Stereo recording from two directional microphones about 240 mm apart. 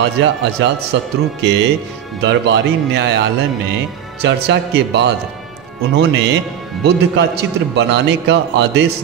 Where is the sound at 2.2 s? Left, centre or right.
Right.